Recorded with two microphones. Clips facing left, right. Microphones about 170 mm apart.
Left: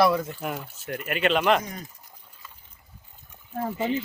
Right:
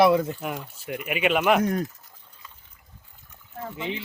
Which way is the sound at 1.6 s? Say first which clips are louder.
Right 13 dB; 60° right (ahead or behind).